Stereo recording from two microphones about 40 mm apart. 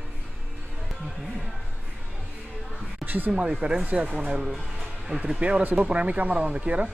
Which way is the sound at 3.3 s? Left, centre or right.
Right.